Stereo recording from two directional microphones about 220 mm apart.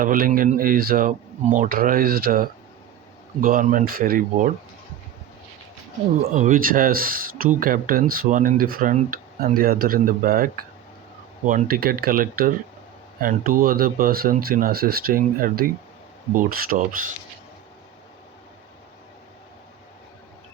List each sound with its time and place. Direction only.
0.0 s speech: 40° right (ahead or behind)
6.3 s speech: 35° right (ahead or behind)